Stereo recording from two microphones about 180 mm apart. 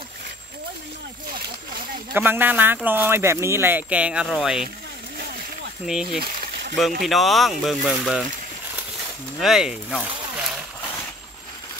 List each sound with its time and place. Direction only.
2.1 s speech: 10° right (ahead or behind)
5.9 s speech: 5° right (ahead or behind)
9.4 s speech: 5° right (ahead or behind)